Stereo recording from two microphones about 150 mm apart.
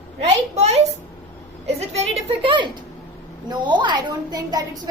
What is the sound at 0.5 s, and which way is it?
Speech, 45° right (ahead or behind).